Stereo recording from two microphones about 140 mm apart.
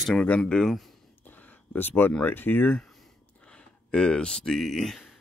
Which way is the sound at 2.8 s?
5° left (ahead or behind).